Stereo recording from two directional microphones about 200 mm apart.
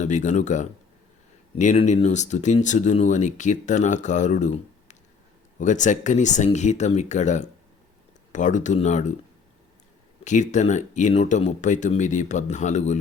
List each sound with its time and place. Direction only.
0.0 s speech: 35° left (ahead or behind)
10.2 s speech: 35° left (ahead or behind)